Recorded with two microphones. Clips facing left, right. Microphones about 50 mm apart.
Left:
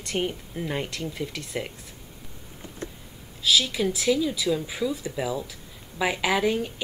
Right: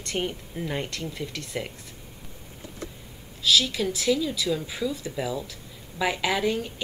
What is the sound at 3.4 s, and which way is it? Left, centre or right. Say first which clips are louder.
Speech: even; centre.